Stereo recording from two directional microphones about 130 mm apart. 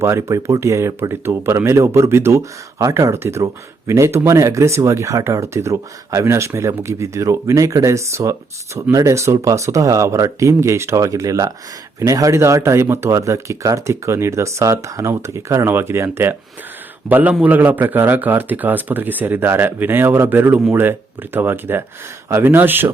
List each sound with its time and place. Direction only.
0.0 s a man's voice: 20° right (ahead or behind)